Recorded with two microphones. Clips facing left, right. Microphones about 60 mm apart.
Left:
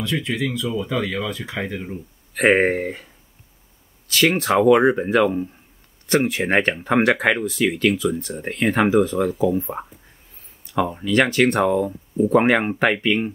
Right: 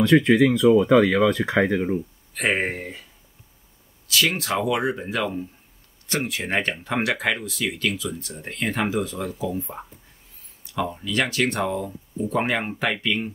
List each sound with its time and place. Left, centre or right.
0.0 s speech: right
2.3 s speech: left
4.1 s speech: left